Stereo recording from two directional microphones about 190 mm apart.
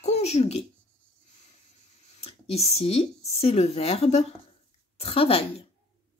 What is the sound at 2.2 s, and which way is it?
Speech, 30° left (ahead or behind).